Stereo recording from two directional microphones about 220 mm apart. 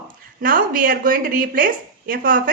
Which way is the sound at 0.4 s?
40° right (ahead or behind).